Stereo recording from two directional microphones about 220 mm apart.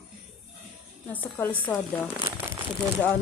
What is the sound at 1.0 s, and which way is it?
Speech, 10° left (ahead or behind).